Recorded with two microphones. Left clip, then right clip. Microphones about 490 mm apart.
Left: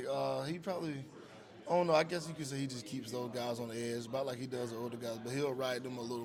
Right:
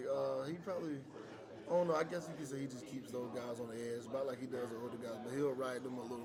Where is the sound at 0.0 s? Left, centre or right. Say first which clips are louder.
Left 2 dB; left.